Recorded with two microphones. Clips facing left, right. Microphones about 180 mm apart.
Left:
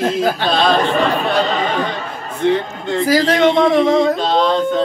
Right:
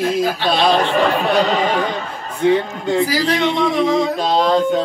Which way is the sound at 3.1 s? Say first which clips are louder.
Left 5 dB; 50° left (ahead or behind).